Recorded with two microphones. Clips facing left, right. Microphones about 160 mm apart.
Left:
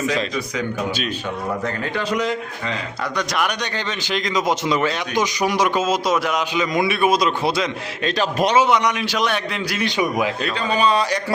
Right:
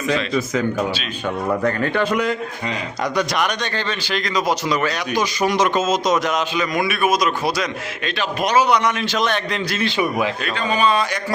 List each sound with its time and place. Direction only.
1.6 s a man's voice: 55° right (ahead or behind)
2.6 s speech: 20° right (ahead or behind)
3.3 s speech: 5° left (ahead or behind)
3.8 s speech: 20° left (ahead or behind)
6.6 s a man's voice: 25° left (ahead or behind)
8.1 s a man's voice: 40° left (ahead or behind)
8.5 s speech: 20° left (ahead or behind)
10.8 s a man's voice: 35° left (ahead or behind)